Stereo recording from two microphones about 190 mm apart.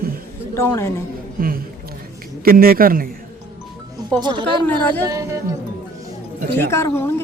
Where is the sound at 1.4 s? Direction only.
50° right (ahead or behind).